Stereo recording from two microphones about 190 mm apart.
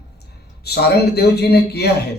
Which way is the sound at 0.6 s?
60° left (ahead or behind).